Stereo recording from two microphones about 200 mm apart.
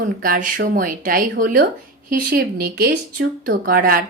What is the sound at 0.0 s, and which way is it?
A woman's voice, 45° right (ahead or behind).